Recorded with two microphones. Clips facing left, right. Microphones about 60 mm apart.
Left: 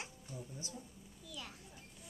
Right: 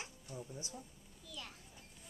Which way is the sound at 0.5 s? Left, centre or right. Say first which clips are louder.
Even; right.